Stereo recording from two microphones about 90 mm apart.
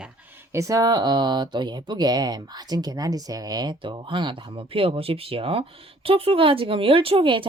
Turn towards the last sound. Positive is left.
turn(degrees=-75)  # may be behind; listen again after turning